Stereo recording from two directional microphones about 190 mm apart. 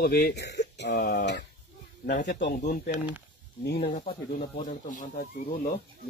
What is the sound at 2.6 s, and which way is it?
Speech, 45° left (ahead or behind).